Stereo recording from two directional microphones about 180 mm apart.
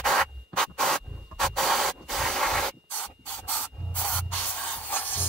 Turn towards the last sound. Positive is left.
turn(degrees=10)  # may be behind; listen again after turning